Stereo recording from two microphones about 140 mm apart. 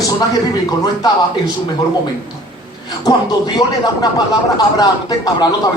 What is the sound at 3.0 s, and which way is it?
Speech, 30° left (ahead or behind).